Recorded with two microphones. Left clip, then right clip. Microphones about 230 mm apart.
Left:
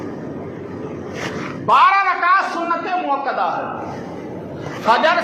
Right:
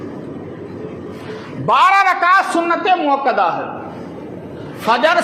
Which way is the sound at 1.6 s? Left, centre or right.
Right.